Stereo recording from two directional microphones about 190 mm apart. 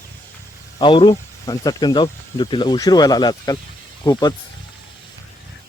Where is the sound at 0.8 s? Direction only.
25° left (ahead or behind).